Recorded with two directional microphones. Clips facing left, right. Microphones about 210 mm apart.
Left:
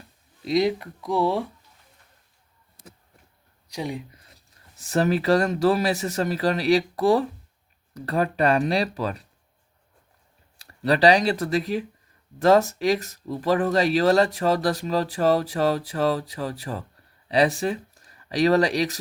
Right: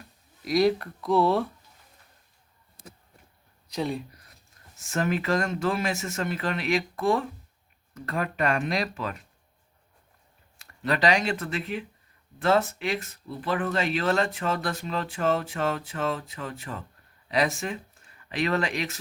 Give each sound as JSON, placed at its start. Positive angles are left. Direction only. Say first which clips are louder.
{"t": 0.4, "sound": "speech", "louder": "even", "side_deg": 20}
{"t": 3.7, "sound": "speech", "louder": "right 1 dB", "side_deg": 15}
{"t": 4.8, "sound": "speech", "louder": "left 5 dB", "side_deg": 35}
{"t": 10.6, "sound": "speech", "louder": "left 6 dB", "side_deg": 35}